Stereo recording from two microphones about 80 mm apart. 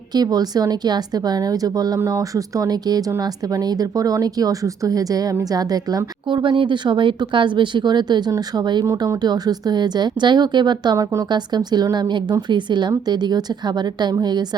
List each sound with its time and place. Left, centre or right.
0.1 s a woman's voice: right
6.2 s a woman's voice: right
8.9 s a woman's voice: right
10.9 s speech: right
11.3 s a woman's voice: right